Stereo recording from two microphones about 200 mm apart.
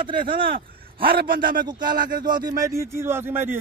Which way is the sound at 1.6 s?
20° right (ahead or behind).